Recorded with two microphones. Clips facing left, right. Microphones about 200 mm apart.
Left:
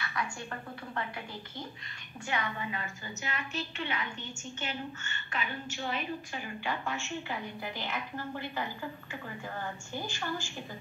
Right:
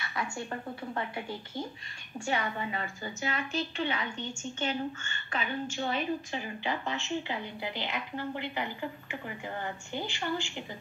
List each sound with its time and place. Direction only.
0.1 s a woman's voice: 25° right (ahead or behind)